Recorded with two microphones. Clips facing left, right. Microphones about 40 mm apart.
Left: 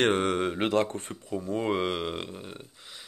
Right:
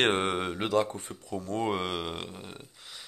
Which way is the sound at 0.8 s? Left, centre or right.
Left.